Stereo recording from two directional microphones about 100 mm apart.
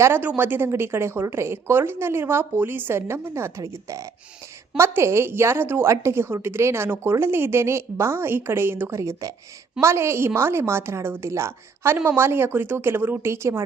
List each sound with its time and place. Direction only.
0.0 s a woman's voice: 20° right (ahead or behind)